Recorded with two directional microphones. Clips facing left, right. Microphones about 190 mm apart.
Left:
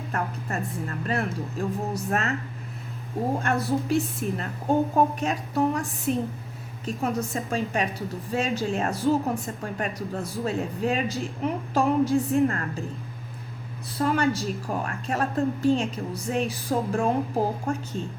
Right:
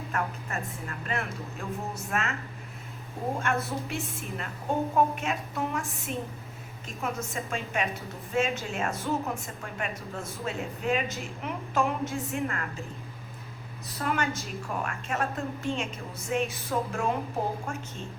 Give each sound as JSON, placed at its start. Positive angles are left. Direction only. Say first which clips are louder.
{"t": 0.1, "sound": "a woman's voice", "louder": "left 3 dB", "side_deg": 35}
{"t": 3.3, "sound": "a woman's voice", "louder": "left 5 dB", "side_deg": 35}
{"t": 13.8, "sound": "a woman's voice", "louder": "left 6 dB", "side_deg": 30}